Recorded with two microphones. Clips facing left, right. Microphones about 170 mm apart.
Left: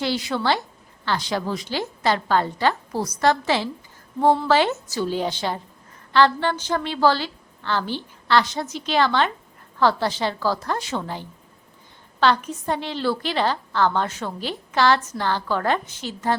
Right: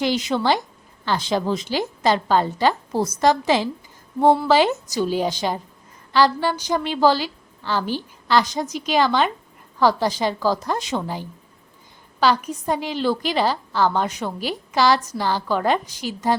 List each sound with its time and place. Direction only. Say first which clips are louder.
0.0 s a woman's voice: right 3 dB; 20° right (ahead or behind)